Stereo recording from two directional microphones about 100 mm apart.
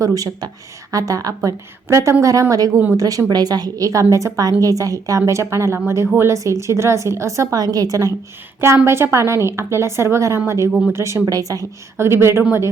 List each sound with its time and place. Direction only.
0.0 s a woman's voice: 35° right (ahead or behind)
8.6 s a woman's voice: 25° right (ahead or behind)
10.7 s speech: 5° left (ahead or behind)
10.9 s a woman's voice: 30° right (ahead or behind)
11.9 s a woman's voice: 25° right (ahead or behind)